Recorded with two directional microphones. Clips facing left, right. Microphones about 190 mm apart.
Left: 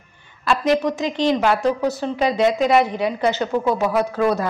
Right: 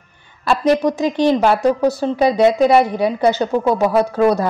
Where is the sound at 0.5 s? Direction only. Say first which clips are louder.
Right 3 dB; 35° right (ahead or behind).